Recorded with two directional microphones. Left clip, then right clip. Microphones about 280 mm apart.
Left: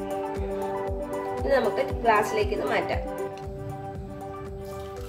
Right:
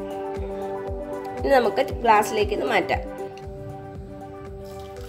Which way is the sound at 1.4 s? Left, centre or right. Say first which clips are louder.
Right 5 dB; right.